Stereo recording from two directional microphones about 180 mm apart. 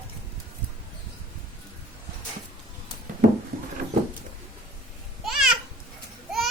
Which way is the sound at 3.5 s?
60° right (ahead or behind).